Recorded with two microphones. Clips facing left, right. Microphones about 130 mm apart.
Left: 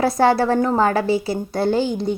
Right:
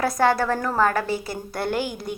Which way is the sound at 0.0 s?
30° left (ahead or behind).